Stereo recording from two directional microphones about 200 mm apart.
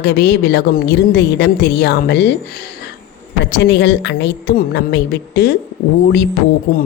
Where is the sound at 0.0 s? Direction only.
55° left (ahead or behind).